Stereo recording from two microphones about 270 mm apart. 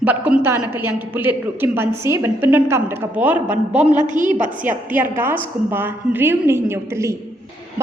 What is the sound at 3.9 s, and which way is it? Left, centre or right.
Speech, right.